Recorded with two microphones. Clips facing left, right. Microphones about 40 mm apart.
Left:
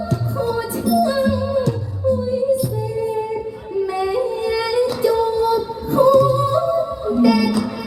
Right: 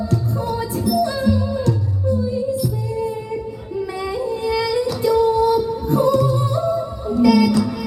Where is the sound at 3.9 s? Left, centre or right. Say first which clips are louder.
Left 7 dB; centre.